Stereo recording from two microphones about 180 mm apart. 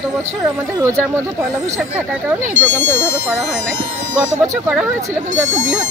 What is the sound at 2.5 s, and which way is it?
Speech, 10° left (ahead or behind).